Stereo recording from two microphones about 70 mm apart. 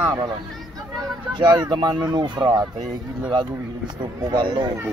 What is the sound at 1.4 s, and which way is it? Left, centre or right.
Speech, right.